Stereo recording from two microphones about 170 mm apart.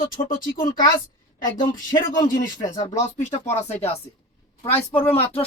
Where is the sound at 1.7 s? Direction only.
50° left (ahead or behind).